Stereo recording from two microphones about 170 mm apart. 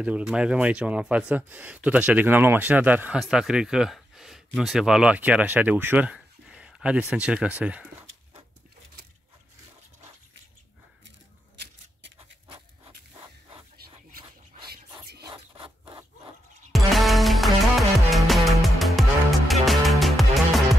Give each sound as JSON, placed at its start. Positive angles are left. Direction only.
{"t": 0.0, "sound": "speech", "side_deg": -5}
{"t": 14.7, "sound": "a sound", "side_deg": -70}
{"t": 16.7, "sound": "music", "side_deg": 0}